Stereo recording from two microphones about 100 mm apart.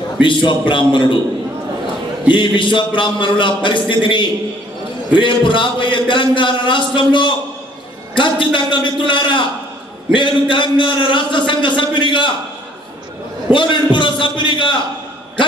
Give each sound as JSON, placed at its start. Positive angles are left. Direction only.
{"t": 0.2, "sound": "a man's voice", "side_deg": 55}
{"t": 2.3, "sound": "a man's voice", "side_deg": 55}
{"t": 13.5, "sound": "a man's voice", "side_deg": 55}